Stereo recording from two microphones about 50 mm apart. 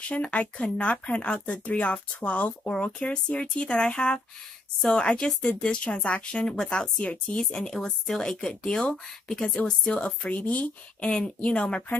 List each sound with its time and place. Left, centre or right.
0.0 s speech: left
2.7 s speech: centre
5.9 s speech: left
6.3 s speech: centre
7.5 s speech: centre
10.3 s speech: left
11.0 s speech: left